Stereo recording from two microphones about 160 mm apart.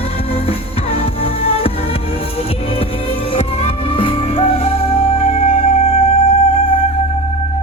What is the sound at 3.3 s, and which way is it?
Music, 40° left (ahead or behind).